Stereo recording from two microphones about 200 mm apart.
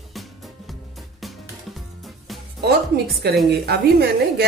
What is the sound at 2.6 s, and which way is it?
Speech, 55° right (ahead or behind).